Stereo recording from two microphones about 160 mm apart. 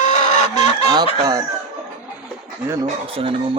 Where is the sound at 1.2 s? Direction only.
25° right (ahead or behind).